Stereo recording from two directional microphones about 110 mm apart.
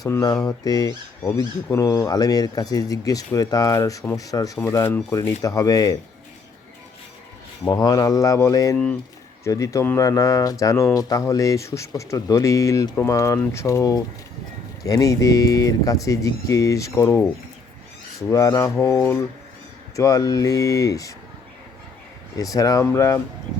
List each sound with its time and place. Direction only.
0.3 s speech: 35° left (ahead or behind)
7.6 s speech: 35° left (ahead or behind)
8.7 s speech: 10° left (ahead or behind)
9.4 s speech: 30° left (ahead or behind)
18.2 s speech: 30° left (ahead or behind)
20.0 s speech: 30° left (ahead or behind)
22.4 s speech: 30° left (ahead or behind)